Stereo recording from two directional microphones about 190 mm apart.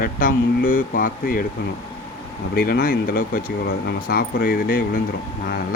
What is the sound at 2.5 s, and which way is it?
Speech, 50° left (ahead or behind).